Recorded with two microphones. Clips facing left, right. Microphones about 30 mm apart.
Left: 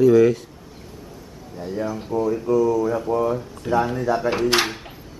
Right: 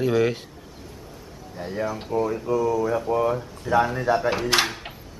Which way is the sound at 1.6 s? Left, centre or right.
Right.